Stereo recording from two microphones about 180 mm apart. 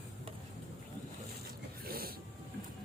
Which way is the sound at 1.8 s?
55° right (ahead or behind).